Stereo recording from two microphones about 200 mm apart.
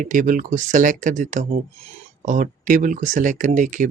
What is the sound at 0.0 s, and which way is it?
Speech, 40° right (ahead or behind).